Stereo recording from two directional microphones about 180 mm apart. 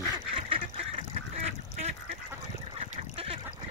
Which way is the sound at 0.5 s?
30° right (ahead or behind).